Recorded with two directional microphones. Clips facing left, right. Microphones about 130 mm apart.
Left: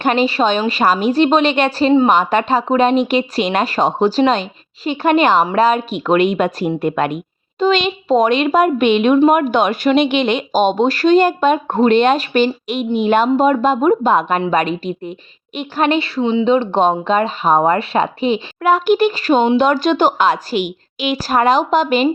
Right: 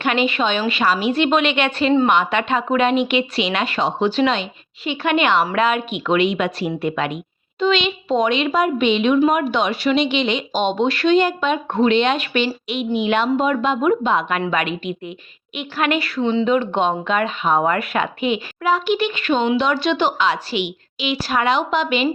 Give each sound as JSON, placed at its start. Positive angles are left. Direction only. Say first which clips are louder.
{"t": 0.0, "sound": "a woman's voice", "louder": "left 4 dB", "side_deg": 40}
{"t": 16.2, "sound": "speech", "louder": "left 2 dB", "side_deg": 15}
{"t": 16.5, "sound": "speech", "louder": "left 4 dB", "side_deg": 30}
{"t": 18.6, "sound": "a woman's voice", "louder": "left 6 dB", "side_deg": 50}